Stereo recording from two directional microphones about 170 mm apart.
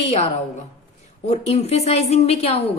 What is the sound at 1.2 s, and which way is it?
A woman's voice, 40° left (ahead or behind).